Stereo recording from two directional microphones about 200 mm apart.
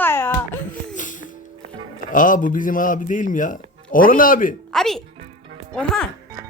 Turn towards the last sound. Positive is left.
turn(degrees=5)  # may be behind; listen again after turning